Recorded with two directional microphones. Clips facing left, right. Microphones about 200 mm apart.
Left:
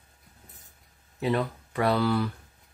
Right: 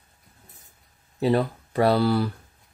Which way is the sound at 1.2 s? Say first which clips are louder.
Right 5 dB; 35° right (ahead or behind).